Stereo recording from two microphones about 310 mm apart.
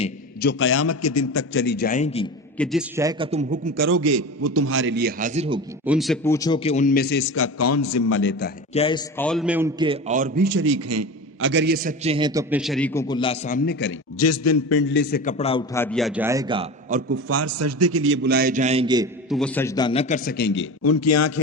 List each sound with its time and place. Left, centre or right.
0.3 s a man's voice: left
1.5 s a man's voice: left
2.6 s a man's voice: centre
3.8 s a man's voice: right
4.0 s a man's voice: right
5.8 s a man's voice: centre; by 8.1 s left
8.1 s a man's voice: left
8.7 s a man's voice: centre; by 10.6 s right
10.6 s a man's voice: right
11.3 s a man's voice: right; by 13.9 s left
14.2 s a man's voice: left
14.8 s a man's voice: left; by 17.0 s centre
17.1 s a man's voice: right; by 19.0 s centre
19.3 s a man's voice: centre; by 21.3 s left